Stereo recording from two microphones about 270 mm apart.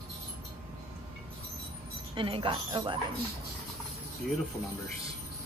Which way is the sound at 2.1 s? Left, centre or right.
Centre.